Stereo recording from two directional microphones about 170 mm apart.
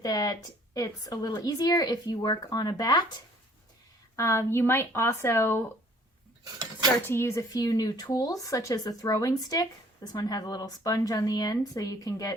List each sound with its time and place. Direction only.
0.0 s speech: 20° left (ahead or behind)
4.2 s speech: 15° left (ahead or behind)
6.4 s cutlery: 20° right (ahead or behind)
7.1 s speech: 15° left (ahead or behind)